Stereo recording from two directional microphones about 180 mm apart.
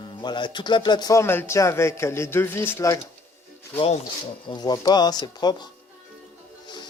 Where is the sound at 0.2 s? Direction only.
25° left (ahead or behind).